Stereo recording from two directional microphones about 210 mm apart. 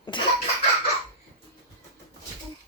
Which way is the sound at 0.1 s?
20° left (ahead or behind).